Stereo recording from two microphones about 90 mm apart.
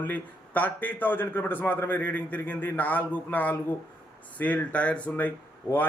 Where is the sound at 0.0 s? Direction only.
20° left (ahead or behind).